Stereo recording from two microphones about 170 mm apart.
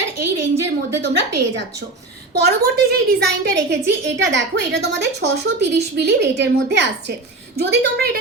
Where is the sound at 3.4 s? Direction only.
85° right.